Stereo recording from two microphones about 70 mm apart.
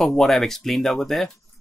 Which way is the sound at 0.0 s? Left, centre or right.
Centre.